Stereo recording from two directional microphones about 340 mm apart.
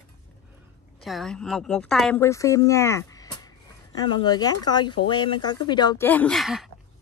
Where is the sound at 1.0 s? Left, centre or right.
Centre.